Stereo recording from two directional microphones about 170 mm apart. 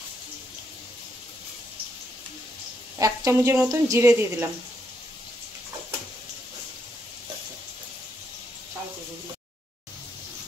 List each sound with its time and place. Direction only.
3.0 s a woman's voice: 15° right (ahead or behind)